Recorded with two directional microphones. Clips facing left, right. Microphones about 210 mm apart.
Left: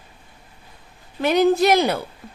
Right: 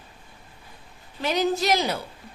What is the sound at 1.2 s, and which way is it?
Speech, 55° left (ahead or behind).